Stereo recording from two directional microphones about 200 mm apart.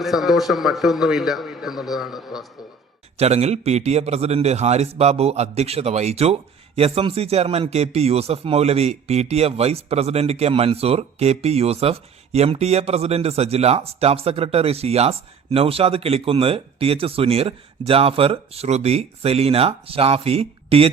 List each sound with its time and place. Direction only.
0.0 s a man's voice: centre (ahead or behind)
3.2 s a man's voice: 30° right (ahead or behind)